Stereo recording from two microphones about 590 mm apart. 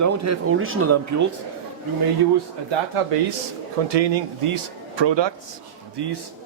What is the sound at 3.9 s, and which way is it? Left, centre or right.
Speech, right.